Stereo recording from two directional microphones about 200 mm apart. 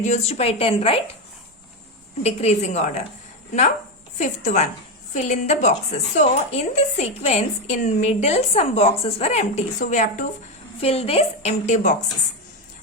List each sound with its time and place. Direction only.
0.0 s a woman's voice: 35° left (ahead or behind)
2.2 s a woman's voice: 35° left (ahead or behind)
4.2 s a woman's voice: 35° left (ahead or behind)